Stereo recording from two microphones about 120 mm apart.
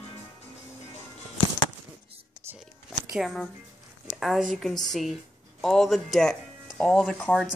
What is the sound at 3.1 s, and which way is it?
Speech, centre (ahead or behind).